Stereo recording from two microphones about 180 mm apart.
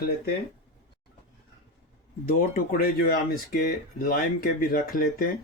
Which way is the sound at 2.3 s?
50° left (ahead or behind).